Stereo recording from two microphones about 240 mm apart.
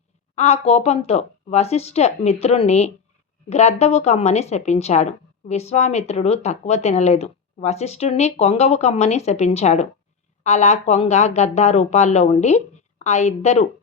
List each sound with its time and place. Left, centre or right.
0.3 s speech: left